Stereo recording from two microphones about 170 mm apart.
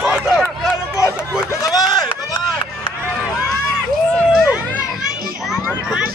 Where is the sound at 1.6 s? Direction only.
20° left (ahead or behind).